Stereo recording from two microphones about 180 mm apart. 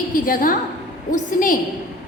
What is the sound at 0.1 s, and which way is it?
A woman's voice, 50° left (ahead or behind).